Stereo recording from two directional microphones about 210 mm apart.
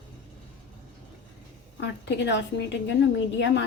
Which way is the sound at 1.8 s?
55° left (ahead or behind).